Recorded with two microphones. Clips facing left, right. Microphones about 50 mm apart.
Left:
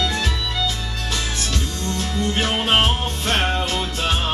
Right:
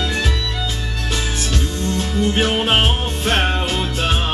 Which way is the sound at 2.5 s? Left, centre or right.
Centre.